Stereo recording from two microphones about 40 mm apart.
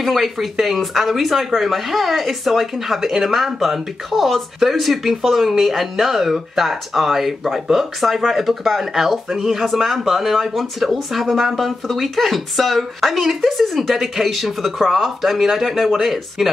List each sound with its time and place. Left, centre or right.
0.0 s speech: centre